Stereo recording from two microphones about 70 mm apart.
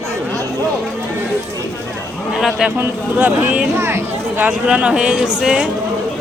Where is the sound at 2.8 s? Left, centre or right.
Right.